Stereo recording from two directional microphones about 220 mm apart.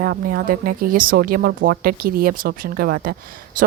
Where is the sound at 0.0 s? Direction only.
45° right (ahead or behind).